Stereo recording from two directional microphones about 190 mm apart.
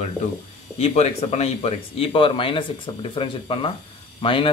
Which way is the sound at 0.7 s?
35° left (ahead or behind).